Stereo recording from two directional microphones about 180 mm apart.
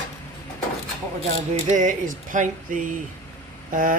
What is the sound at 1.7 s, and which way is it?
Speech, 45° right (ahead or behind).